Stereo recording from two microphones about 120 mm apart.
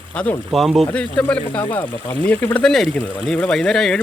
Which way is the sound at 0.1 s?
15° left (ahead or behind).